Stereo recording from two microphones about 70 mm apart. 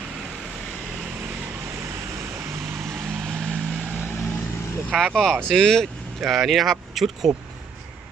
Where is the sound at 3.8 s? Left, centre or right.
Right.